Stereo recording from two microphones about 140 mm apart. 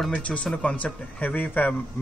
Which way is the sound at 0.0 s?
10° left (ahead or behind).